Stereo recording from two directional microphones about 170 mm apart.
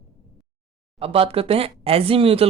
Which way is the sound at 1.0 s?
35° right (ahead or behind).